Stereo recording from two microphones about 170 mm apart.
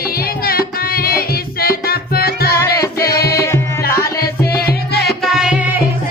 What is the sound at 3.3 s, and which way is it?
Music, 15° left (ahead or behind).